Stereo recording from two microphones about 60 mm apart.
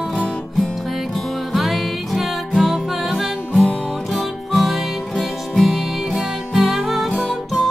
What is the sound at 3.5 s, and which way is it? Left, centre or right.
Music, centre.